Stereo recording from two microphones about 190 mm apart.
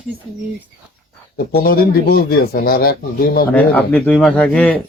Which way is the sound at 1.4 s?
55° left (ahead or behind).